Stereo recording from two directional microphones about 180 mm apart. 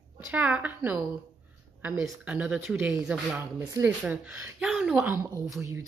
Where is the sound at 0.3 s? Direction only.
10° right (ahead or behind).